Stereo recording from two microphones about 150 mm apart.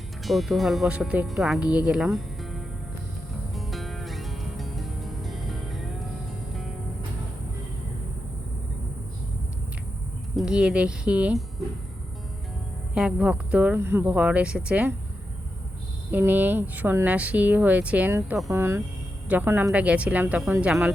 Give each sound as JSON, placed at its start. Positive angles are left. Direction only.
{"t": 0.2, "sound": "speech", "side_deg": 0}
{"t": 3.5, "sound": "music", "side_deg": 0}
{"t": 10.3, "sound": "speech", "side_deg": -5}
{"t": 12.9, "sound": "speech", "side_deg": -5}
{"t": 16.1, "sound": "speech", "side_deg": -10}